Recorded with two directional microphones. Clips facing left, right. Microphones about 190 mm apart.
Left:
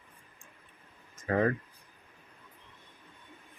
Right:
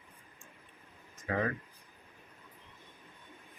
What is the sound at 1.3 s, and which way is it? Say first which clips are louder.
Speech: left 6 dB; 40° left (ahead or behind).